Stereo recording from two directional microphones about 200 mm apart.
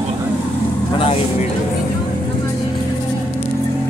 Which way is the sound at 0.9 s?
30° left (ahead or behind).